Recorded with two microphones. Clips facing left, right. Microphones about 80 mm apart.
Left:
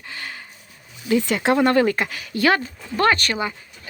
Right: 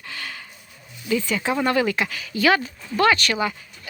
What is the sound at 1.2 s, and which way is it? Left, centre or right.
Speech, left.